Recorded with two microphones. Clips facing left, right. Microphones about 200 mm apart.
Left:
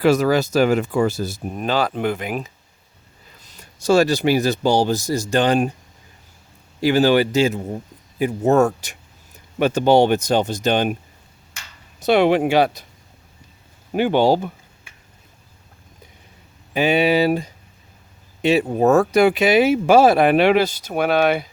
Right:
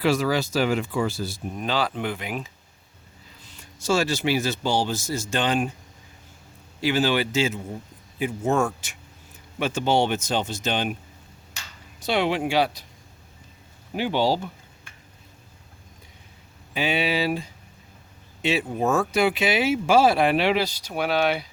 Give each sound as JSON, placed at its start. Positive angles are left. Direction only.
{"t": 0.0, "sound": "speech", "side_deg": 45}
{"t": 3.4, "sound": "a sound", "side_deg": 40}
{"t": 3.9, "sound": "speech", "side_deg": 40}
{"t": 6.8, "sound": "speech", "side_deg": 40}
{"t": 12.0, "sound": "speech", "side_deg": 55}
{"t": 13.9, "sound": "speech", "side_deg": 50}
{"t": 16.7, "sound": "speech", "side_deg": 45}
{"t": 18.8, "sound": "speech", "side_deg": 65}
{"t": 19.1, "sound": "speech", "side_deg": 45}
{"t": 20.1, "sound": "speech", "side_deg": 55}